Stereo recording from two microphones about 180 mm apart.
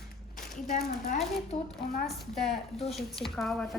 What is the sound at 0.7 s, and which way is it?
Speech, 45° left (ahead or behind).